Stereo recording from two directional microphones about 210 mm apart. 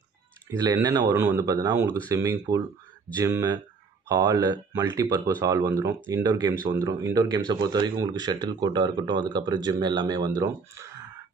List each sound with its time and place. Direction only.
0.5 s speech: 15° right (ahead or behind)